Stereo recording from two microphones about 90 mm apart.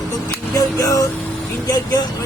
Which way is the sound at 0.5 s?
40° left (ahead or behind).